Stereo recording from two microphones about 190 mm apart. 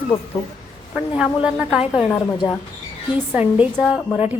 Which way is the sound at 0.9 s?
5° right (ahead or behind).